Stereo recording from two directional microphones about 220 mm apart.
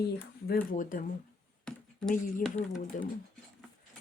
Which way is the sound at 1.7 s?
5° left (ahead or behind).